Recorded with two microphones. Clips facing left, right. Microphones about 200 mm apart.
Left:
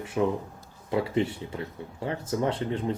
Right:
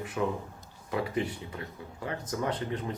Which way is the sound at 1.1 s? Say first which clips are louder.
Left 5 dB; 30° left (ahead or behind).